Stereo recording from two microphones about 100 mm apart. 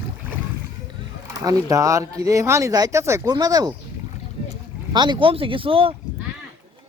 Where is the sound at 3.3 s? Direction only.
40° right (ahead or behind).